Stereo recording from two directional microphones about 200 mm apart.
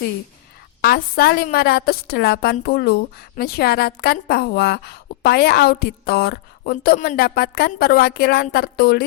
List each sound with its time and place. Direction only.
0.8 s a woman's voice: 50° left (ahead or behind)